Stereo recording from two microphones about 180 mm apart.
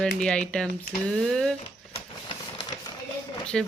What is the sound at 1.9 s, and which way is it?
Printer, 30° left (ahead or behind).